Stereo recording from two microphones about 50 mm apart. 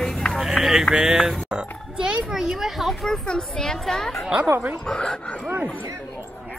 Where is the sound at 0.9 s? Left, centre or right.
Centre.